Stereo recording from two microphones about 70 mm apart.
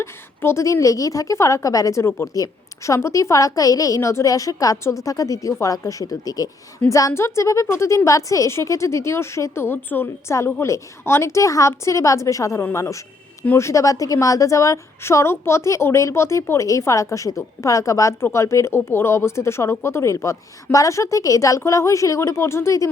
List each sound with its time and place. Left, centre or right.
0.0 s a woman's voice: left
2.2 s a woman's voice: left
7.1 s a woman's voice: left
10.3 s a woman's voice: left